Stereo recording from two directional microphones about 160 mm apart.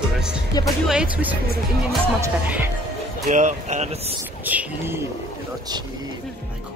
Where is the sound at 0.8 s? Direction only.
5° right (ahead or behind).